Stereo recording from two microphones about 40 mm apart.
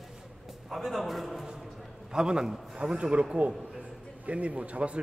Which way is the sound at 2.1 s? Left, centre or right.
Centre.